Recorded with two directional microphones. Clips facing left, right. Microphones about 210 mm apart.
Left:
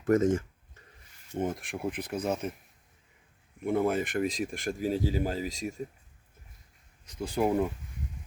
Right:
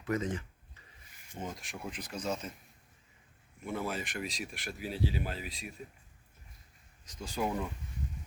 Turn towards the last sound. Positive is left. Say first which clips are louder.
# left 7 dB
turn(degrees=55)  # may be behind; listen again after turning